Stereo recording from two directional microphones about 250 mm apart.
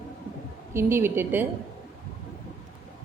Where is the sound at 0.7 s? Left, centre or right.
Centre.